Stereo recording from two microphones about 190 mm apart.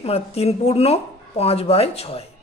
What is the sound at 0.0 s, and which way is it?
A woman's voice, 30° left (ahead or behind).